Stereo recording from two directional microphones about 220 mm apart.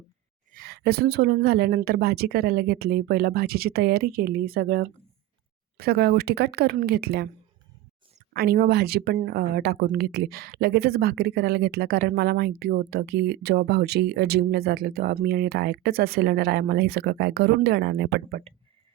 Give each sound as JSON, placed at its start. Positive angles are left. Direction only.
{"t": 0.5, "sound": "speech", "side_deg": -45}
{"t": 8.3, "sound": "speech", "side_deg": -45}